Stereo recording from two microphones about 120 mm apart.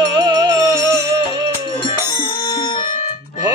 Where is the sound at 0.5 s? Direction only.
25° right (ahead or behind).